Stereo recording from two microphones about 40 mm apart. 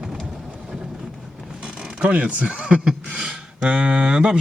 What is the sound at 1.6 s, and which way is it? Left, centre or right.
Mechanisms, right.